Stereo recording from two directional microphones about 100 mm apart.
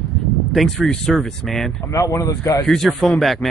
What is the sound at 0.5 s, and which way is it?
Speech, centre (ahead or behind).